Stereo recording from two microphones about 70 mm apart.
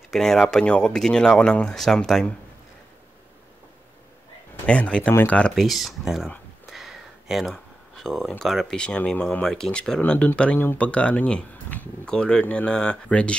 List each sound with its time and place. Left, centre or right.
0.1 s speech: centre
4.6 s speech: centre
5.5 s speech: centre
6.7 s a sound: centre
7.5 s speech: centre
8.7 s speech: centre